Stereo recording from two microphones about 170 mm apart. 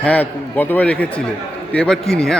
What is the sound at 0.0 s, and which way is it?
A woman's voice, 10° left (ahead or behind).